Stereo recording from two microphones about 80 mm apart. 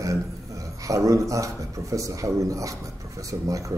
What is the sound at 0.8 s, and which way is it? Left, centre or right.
A man's voice, right.